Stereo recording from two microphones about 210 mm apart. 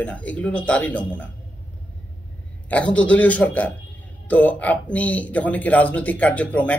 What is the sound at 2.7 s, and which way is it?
Speech, 5° left (ahead or behind).